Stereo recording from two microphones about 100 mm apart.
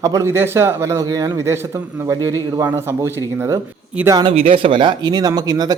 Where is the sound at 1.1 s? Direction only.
40° right (ahead or behind).